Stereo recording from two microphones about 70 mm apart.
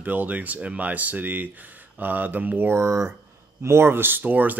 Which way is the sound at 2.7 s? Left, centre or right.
Right.